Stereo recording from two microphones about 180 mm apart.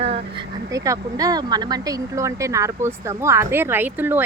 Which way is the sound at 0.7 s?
20° right (ahead or behind).